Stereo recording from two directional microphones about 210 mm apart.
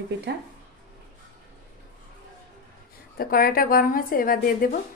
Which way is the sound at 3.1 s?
45° left (ahead or behind).